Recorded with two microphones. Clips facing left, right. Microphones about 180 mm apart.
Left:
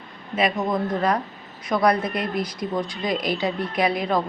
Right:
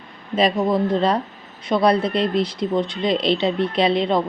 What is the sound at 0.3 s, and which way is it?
Speech, 30° right (ahead or behind).